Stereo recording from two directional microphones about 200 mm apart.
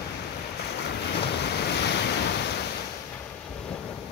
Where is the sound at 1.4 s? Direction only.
55° left (ahead or behind).